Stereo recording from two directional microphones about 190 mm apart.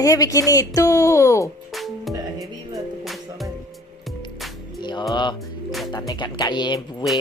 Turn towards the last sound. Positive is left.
turn(degrees=25)  # may be behind; listen again after turning